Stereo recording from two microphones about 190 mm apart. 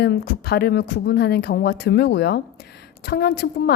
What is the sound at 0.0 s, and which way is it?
A woman's voice, 60° left (ahead or behind).